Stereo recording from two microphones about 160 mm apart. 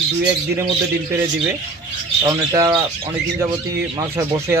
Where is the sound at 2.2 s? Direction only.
25° right (ahead or behind).